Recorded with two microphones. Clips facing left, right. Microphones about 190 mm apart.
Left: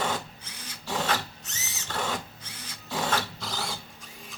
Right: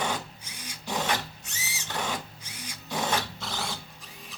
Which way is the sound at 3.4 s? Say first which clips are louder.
Even; centre (ahead or behind).